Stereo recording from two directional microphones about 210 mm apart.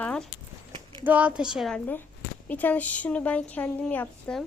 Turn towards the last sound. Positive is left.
turn(degrees=5)  # may be behind; listen again after turning